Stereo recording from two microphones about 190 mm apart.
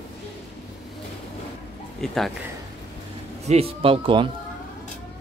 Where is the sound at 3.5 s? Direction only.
30° right (ahead or behind).